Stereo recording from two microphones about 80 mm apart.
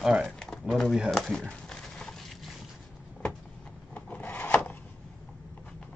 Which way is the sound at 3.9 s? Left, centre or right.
Left.